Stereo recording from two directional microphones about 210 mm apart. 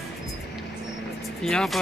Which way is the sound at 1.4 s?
Centre (ahead or behind).